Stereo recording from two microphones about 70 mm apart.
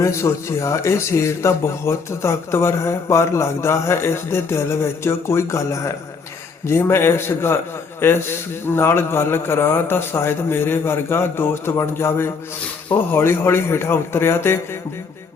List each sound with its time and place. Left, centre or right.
0.0 s speech: left